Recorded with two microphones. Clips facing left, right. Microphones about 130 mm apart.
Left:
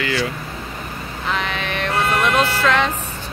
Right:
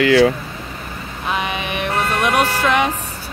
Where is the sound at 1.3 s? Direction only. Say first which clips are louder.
Right 2 dB; 15° right (ahead or behind).